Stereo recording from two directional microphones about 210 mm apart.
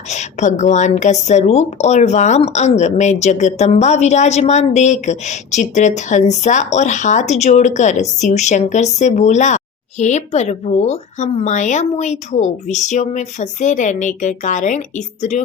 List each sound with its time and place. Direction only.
0.1 s a woman's voice: 35° left (ahead or behind)